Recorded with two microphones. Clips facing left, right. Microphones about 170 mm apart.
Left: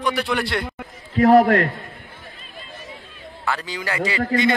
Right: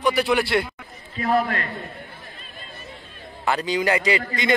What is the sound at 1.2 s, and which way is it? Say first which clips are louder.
Speech: left 9 dB; 80° left.